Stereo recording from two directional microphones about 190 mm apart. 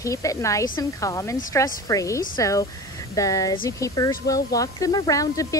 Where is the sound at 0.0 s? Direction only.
15° left (ahead or behind).